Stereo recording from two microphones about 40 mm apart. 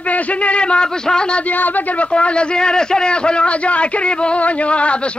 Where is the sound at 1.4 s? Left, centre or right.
Left.